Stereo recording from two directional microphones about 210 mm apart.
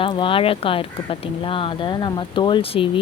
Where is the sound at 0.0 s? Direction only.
25° left (ahead or behind).